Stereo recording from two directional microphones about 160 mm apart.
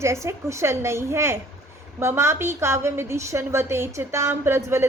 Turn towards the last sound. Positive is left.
turn(degrees=-15)  # may be behind; listen again after turning